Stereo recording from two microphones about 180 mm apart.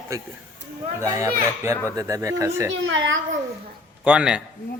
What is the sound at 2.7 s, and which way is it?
Speech, 90° right.